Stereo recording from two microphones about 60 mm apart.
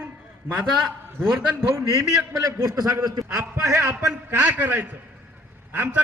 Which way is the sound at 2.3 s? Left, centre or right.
Right.